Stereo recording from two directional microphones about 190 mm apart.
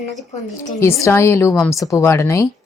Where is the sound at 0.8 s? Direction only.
15° left (ahead or behind).